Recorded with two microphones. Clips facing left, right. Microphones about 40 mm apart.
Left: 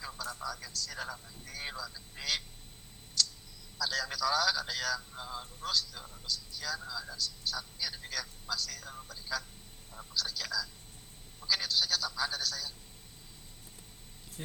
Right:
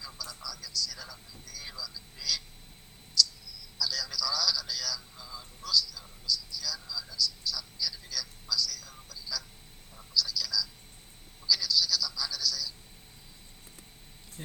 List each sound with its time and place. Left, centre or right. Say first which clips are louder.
0.4 s speech: right 1 dB; left
3.2 s duck: right 5 dB; left
3.8 s speech: left 1 dB; left
14.4 s speech: left 1 dB; centre